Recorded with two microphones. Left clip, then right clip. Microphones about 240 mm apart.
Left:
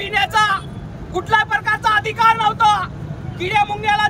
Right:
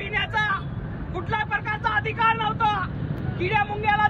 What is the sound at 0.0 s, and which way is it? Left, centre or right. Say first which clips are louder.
Vehicle: left 9 dB; left.